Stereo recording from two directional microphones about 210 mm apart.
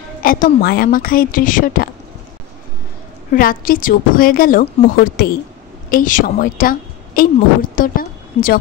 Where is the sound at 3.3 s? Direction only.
40° left (ahead or behind).